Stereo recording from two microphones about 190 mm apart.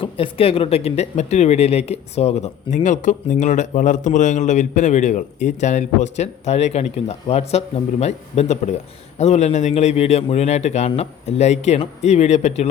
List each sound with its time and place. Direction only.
0.0 s speech: 30° left (ahead or behind)